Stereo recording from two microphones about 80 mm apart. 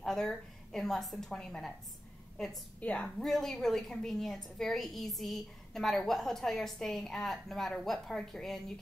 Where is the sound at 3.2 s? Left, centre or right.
Centre.